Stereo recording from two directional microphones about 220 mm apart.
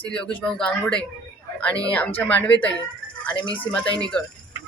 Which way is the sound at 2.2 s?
5° left (ahead or behind).